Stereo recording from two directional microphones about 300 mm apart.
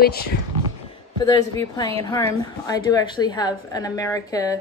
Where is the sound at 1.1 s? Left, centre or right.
Centre.